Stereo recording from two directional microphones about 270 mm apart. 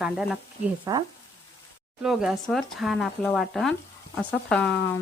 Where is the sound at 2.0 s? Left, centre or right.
Centre.